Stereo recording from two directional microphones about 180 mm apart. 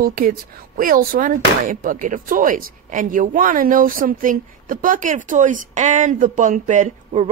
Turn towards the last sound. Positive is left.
turn(degrees=-45)  # may be behind; listen again after turning